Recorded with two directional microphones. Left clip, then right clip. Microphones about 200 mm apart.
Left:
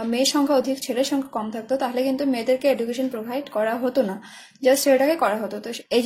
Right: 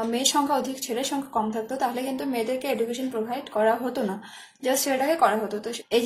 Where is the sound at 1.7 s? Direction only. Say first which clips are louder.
Left 5 dB; 40° left (ahead or behind).